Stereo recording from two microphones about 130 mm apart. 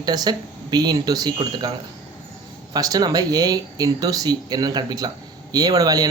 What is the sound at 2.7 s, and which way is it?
Speech, 30° right (ahead or behind).